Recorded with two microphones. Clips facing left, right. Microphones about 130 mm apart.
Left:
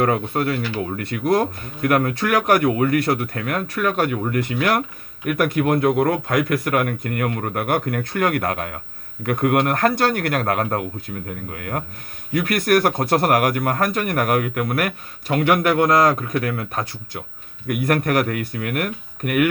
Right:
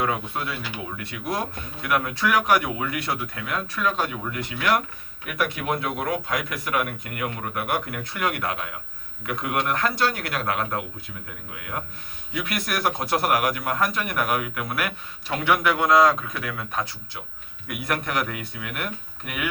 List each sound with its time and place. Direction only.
0.0 s speech: 55° left (ahead or behind)